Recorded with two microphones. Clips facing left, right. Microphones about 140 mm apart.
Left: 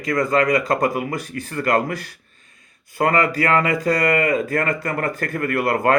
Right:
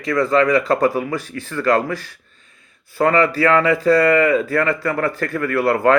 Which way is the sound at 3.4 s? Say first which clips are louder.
Right 4 dB; 40° left (ahead or behind).